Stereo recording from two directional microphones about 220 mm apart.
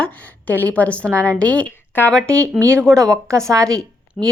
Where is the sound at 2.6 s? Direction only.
10° right (ahead or behind).